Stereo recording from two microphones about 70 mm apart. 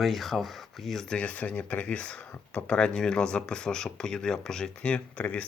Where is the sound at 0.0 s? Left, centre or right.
Centre.